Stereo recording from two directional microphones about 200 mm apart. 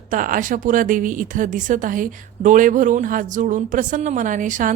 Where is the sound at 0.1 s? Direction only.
40° right (ahead or behind).